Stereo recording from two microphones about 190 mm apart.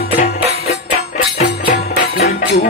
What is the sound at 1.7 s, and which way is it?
Music, 35° left (ahead or behind).